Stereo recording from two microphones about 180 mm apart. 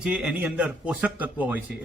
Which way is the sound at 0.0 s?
5° right (ahead or behind).